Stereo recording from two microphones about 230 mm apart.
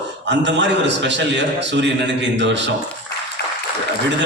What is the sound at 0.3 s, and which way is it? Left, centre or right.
A man's voice, right.